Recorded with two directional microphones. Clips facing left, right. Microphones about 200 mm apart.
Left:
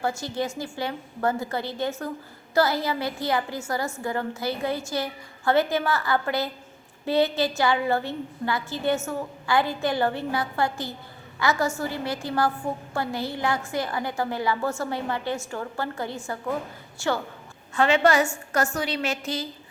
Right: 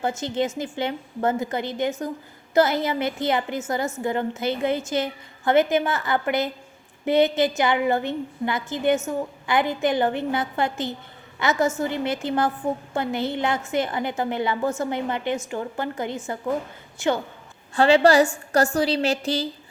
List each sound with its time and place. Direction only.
0.0 s a woman's voice: 20° right (ahead or behind)
17.7 s a woman's voice: 30° right (ahead or behind)